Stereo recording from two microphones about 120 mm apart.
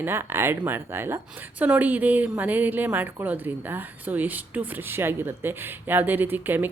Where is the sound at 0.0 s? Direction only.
20° right (ahead or behind).